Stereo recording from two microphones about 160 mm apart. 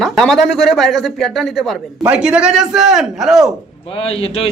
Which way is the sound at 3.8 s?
35° left (ahead or behind).